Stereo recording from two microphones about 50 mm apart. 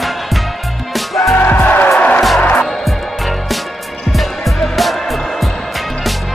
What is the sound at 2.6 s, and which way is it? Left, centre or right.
Music, centre.